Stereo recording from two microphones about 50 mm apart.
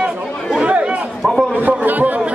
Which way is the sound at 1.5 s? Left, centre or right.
Right.